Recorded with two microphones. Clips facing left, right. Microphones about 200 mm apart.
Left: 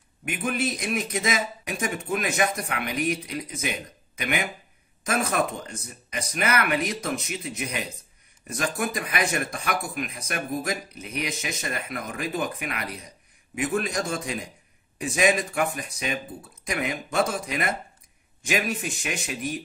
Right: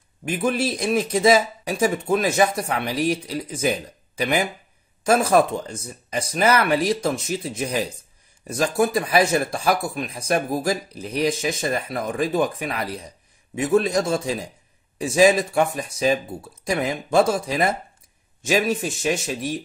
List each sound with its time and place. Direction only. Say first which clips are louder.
0.2 s speech: right 5 dB; 30° right (ahead or behind)